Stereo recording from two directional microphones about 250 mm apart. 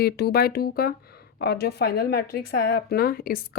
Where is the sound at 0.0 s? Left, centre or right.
Left.